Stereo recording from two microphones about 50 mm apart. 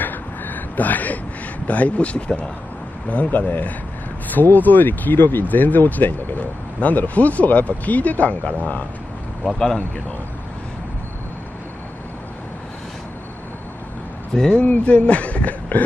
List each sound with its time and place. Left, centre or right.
0.0 s a sound: left
1.7 s speech: left
14.3 s speech: centre
14.6 s speech: left